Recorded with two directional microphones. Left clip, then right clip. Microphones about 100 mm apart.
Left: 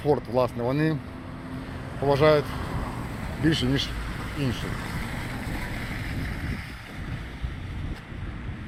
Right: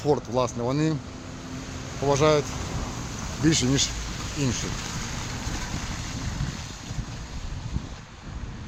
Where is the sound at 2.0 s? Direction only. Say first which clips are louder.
Left 1 dB; 45° right (ahead or behind).